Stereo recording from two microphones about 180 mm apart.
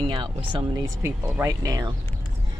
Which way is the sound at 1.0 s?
15° right (ahead or behind).